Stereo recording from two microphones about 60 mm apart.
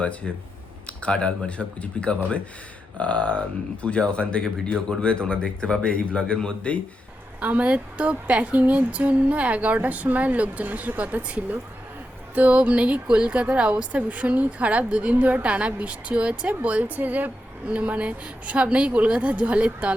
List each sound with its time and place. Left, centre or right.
0.2 s speech: centre
7.3 s speech: right